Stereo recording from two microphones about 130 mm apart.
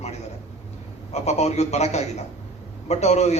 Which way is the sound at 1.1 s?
55° left (ahead or behind).